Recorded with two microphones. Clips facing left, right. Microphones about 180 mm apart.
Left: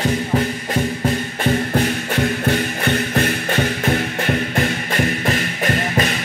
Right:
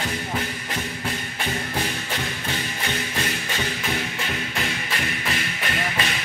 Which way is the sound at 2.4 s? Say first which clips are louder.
Left 10 dB; 55° left (ahead or behind).